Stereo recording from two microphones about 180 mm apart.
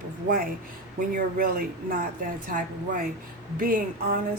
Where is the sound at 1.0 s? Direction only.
50° right (ahead or behind).